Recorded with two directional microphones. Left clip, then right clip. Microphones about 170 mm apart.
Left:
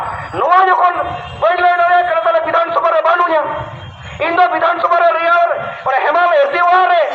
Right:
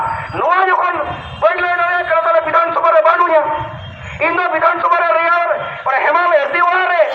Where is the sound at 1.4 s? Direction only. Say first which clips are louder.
Left 2 dB; 20° left (ahead or behind).